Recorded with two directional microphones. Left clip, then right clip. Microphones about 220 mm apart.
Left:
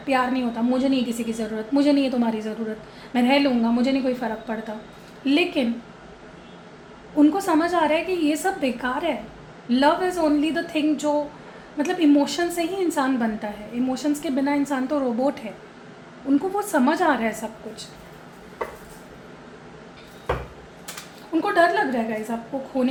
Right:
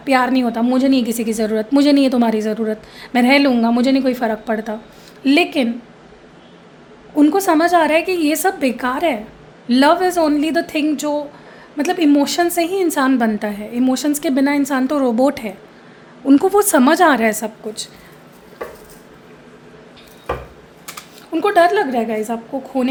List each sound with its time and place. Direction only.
0.0 s a woman's voice: 55° right (ahead or behind)
7.2 s a woman's voice: 55° right (ahead or behind)
21.3 s a woman's voice: 55° right (ahead or behind)